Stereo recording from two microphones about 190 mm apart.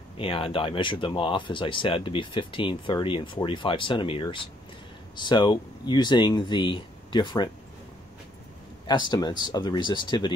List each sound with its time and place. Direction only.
0.2 s speech: 30° left (ahead or behind)
8.8 s speech: 25° left (ahead or behind)